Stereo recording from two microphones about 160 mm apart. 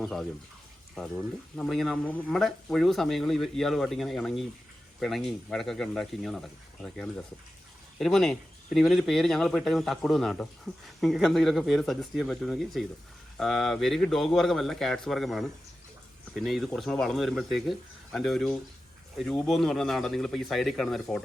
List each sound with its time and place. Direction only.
0.0 s speech: centre (ahead or behind)
1.5 s speech: 5° left (ahead or behind)